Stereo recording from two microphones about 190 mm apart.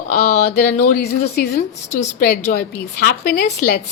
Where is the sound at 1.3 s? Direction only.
55° left (ahead or behind).